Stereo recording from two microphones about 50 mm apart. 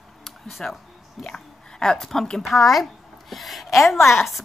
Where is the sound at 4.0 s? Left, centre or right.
Left.